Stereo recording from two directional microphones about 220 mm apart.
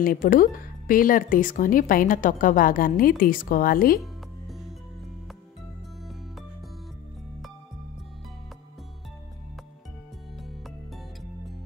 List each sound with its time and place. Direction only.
0.0 s speech: 40° left (ahead or behind)
4.0 s music: centre (ahead or behind)